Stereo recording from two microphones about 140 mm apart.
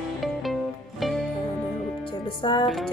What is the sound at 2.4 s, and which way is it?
Music, 35° left (ahead or behind).